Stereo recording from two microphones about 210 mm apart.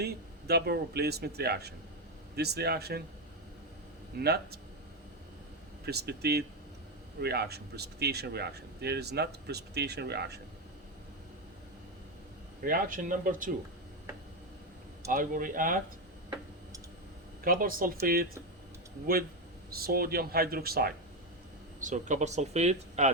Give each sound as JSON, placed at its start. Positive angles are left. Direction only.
{"t": 0.0, "sound": "speech", "side_deg": -50}
{"t": 4.2, "sound": "speech", "side_deg": -50}
{"t": 5.8, "sound": "speech", "side_deg": -50}
{"t": 12.6, "sound": "speech", "side_deg": -40}
{"t": 15.1, "sound": "speech", "side_deg": -40}
{"t": 17.4, "sound": "speech", "side_deg": -40}
{"t": 19.7, "sound": "speech", "side_deg": -45}
{"t": 21.8, "sound": "speech", "side_deg": -35}